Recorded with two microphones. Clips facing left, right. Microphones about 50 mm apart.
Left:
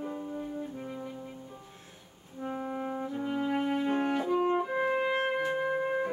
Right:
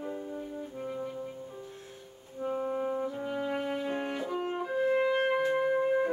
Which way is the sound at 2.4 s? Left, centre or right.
Centre.